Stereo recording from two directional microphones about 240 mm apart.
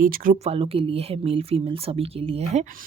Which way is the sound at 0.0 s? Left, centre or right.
Right.